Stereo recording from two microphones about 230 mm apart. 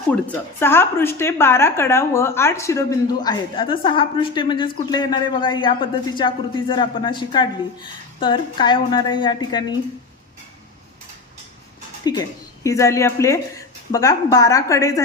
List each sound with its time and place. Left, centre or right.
0.6 s a woman's voice: centre
12.1 s speech: centre